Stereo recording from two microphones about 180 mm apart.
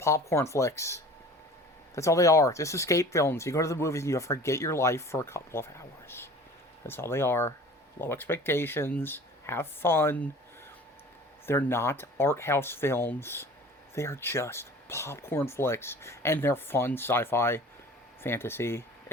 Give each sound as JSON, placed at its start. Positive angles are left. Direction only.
{"t": 0.0, "sound": "speech", "side_deg": 15}
{"t": 11.4, "sound": "speech", "side_deg": 15}